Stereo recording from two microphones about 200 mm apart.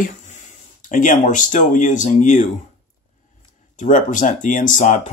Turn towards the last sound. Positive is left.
turn(degrees=40)  # may be behind; listen again after turning